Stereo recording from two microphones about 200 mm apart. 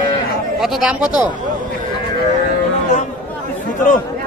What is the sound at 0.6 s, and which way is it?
Speech, 5° right (ahead or behind).